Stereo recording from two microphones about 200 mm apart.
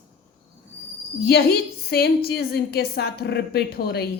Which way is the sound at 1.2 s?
50° left (ahead or behind).